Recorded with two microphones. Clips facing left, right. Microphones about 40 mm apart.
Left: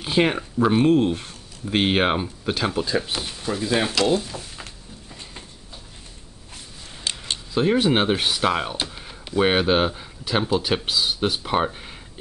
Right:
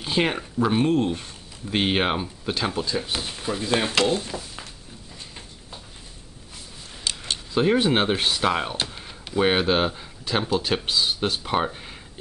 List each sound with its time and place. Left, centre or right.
0.0 s speech: centre
3.4 s speech: centre
3.9 s speech: right
7.1 s a sound: left
7.5 s speech: centre